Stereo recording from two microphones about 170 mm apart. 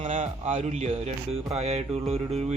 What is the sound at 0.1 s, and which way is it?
A man's voice, 45° right (ahead or behind).